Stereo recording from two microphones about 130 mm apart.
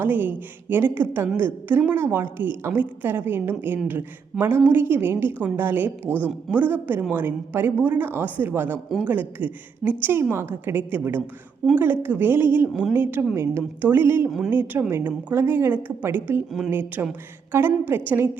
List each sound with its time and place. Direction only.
0.0 s a woman's voice: 15° right (ahead or behind)
14.3 s speech: 5° right (ahead or behind)
14.5 s a woman's voice: 15° right (ahead or behind)